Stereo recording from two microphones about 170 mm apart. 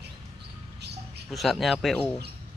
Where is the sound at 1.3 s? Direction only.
Centre (ahead or behind).